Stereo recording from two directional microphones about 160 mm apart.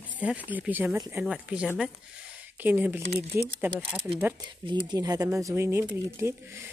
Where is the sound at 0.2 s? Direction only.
10° right (ahead or behind).